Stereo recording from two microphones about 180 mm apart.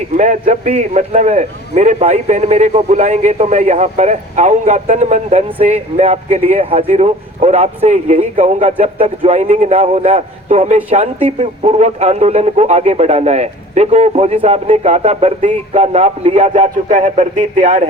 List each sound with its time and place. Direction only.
0.2 s a man's voice: 40° right (ahead or behind)